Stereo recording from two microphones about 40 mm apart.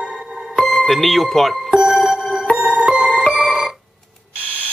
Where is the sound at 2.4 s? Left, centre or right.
Left.